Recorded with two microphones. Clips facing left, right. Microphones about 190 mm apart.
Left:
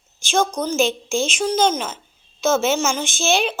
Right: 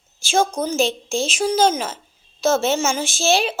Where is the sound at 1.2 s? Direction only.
5° right (ahead or behind).